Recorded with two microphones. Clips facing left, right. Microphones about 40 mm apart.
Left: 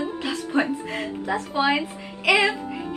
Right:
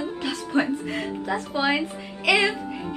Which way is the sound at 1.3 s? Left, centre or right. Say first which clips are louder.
Left 2 dB; centre.